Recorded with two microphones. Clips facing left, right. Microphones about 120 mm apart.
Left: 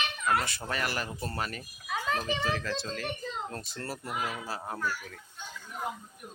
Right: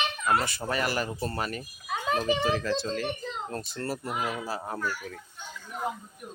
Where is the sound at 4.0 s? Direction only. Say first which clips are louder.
Right 3 dB; 20° right (ahead or behind).